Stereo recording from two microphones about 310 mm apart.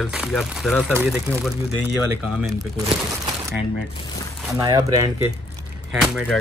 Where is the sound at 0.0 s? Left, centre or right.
Centre.